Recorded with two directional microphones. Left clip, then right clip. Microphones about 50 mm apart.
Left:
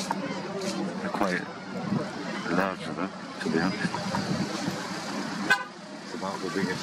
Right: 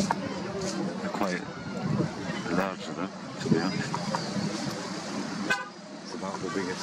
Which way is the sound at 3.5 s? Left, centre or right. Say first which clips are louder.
Left 1 dB; left.